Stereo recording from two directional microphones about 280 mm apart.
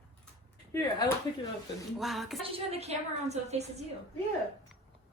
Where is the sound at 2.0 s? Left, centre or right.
Centre.